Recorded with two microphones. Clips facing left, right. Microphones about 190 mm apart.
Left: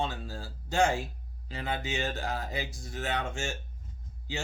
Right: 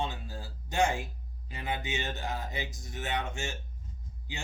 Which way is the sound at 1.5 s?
20° right (ahead or behind).